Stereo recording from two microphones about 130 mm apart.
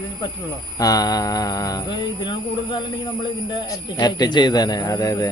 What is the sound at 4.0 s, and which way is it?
A man's voice, 30° left (ahead or behind).